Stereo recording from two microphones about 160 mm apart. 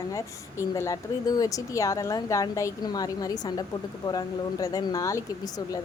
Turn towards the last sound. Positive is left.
turn(degrees=20)  # may be behind; listen again after turning